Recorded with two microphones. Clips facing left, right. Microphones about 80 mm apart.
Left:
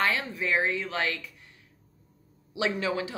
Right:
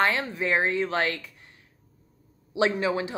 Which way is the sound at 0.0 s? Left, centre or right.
Right.